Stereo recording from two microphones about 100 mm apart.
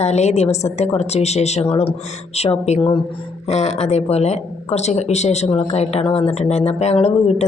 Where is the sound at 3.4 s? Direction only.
90° left.